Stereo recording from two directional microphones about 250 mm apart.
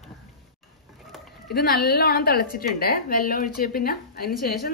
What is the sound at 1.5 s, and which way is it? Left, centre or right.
A woman's voice, left.